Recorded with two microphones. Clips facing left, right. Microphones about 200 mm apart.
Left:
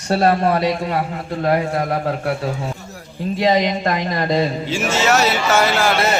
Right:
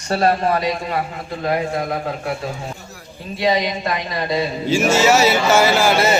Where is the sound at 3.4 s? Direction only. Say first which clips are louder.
Left 2 dB; 50° left (ahead or behind).